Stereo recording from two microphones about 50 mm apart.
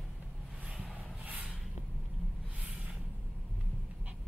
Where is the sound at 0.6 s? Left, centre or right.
Right.